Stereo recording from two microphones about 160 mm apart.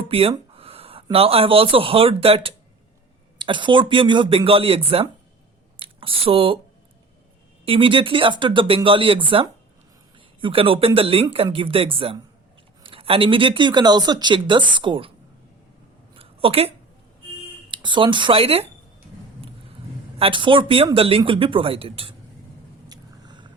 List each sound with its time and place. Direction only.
0.1 s a sound: 35° right (ahead or behind)
1.1 s speech: 35° right (ahead or behind)
7.6 s speech: 35° right (ahead or behind)
16.1 s a sound: 35° right (ahead or behind)
17.7 s speech: 30° right (ahead or behind)
20.1 s speech: 35° right (ahead or behind)
22.9 s vehicle: 25° right (ahead or behind)